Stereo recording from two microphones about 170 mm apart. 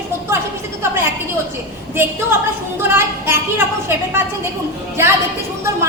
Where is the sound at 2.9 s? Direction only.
15° right (ahead or behind).